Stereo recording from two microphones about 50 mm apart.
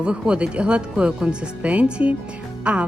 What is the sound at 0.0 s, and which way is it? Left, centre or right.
Speech, right.